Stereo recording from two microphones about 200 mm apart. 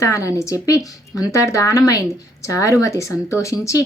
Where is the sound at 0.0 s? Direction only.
15° left (ahead or behind).